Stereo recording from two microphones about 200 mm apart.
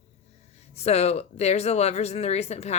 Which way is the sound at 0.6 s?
30° left (ahead or behind).